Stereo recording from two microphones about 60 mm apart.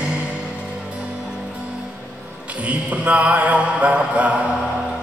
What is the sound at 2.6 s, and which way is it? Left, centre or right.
Music, right.